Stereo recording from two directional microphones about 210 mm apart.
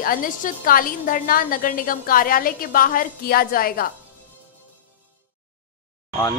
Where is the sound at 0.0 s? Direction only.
40° left (ahead or behind).